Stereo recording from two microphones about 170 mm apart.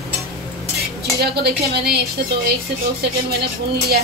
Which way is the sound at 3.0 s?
70° right (ahead or behind).